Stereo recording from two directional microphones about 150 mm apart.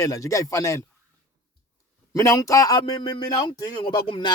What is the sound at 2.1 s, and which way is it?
A man's voice, 20° left (ahead or behind).